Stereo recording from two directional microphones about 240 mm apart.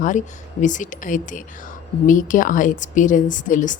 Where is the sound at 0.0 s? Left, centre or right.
Left.